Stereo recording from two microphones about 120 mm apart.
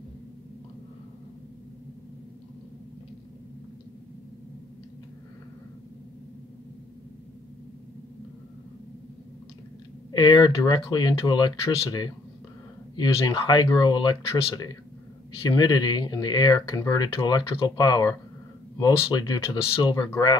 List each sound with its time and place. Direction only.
10.1 s speech: 40° left (ahead or behind)
17.1 s speech: 45° left (ahead or behind)